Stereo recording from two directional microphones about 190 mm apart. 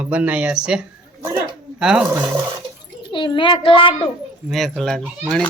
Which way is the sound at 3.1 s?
25° left (ahead or behind).